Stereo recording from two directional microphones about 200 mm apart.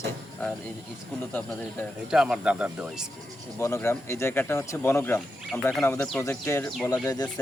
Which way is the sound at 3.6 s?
15° left (ahead or behind).